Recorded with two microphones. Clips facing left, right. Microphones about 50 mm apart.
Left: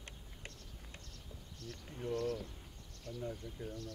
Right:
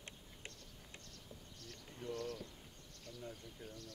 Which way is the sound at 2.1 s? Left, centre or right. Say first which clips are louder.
Left 7 dB; left.